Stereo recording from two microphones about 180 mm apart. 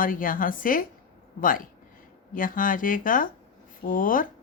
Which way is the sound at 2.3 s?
50° left (ahead or behind).